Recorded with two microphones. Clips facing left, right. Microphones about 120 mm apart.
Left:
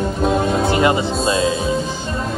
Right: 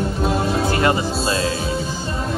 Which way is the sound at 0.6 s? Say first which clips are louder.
Left 3 dB; 20° left (ahead or behind).